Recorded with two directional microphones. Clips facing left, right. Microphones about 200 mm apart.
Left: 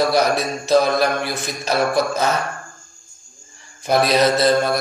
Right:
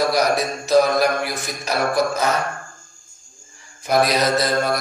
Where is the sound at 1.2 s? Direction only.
25° left (ahead or behind).